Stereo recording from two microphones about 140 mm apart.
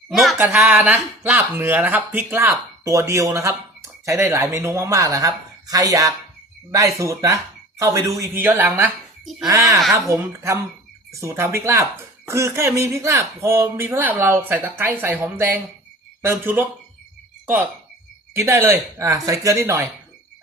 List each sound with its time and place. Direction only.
0.1 s a sound: centre (ahead or behind)
0.3 s speech: 15° right (ahead or behind)
18.3 s speech: 20° right (ahead or behind)